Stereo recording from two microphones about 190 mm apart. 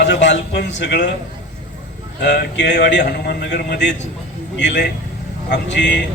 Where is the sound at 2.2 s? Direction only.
65° left (ahead or behind).